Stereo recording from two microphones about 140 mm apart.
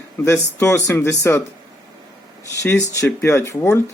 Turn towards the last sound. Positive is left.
turn(degrees=20)  # may be behind; listen again after turning